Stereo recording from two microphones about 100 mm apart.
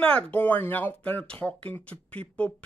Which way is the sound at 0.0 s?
15° left (ahead or behind).